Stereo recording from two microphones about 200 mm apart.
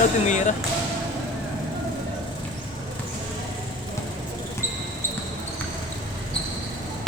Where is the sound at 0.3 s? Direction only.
35° left (ahead or behind).